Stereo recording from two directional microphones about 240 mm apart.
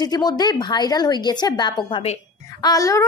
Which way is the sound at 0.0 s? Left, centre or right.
Centre.